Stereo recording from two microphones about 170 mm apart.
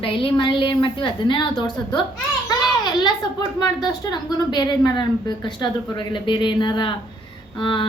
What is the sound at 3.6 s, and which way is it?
A woman's voice, 25° left (ahead or behind).